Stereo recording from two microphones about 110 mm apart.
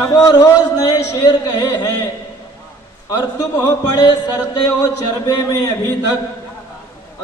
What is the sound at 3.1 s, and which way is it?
A man's voice, 35° left (ahead or behind).